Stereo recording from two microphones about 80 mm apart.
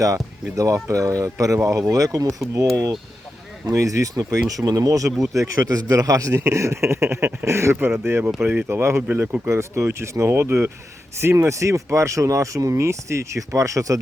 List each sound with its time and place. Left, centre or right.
0.5 s speech: right
3.7 s a man's voice: right